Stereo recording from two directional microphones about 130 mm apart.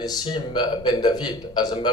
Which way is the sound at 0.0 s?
30° left (ahead or behind).